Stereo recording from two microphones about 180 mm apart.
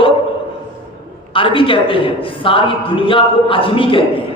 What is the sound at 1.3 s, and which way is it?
A man's voice, 30° left (ahead or behind).